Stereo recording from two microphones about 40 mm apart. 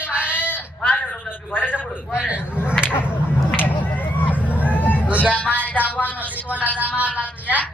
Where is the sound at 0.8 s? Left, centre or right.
Left.